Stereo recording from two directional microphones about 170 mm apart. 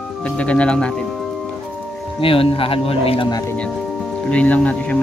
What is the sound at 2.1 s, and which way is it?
Speech, 30° left (ahead or behind).